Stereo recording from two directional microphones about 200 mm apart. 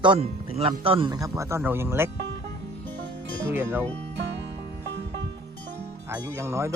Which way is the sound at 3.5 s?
10° right (ahead or behind).